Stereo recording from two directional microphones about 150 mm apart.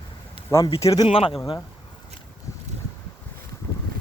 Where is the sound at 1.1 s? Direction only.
40° left (ahead or behind).